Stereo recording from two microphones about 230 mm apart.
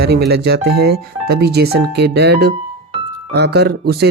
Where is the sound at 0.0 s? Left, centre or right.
Right.